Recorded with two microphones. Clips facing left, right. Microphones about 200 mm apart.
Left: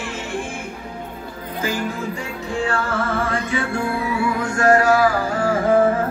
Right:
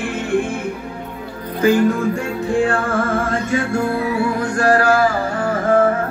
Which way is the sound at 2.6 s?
50° right (ahead or behind).